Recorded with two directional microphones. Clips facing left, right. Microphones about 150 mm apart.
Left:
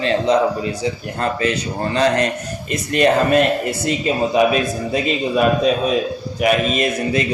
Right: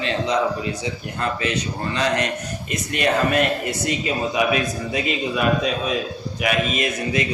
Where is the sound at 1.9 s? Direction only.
35° left (ahead or behind).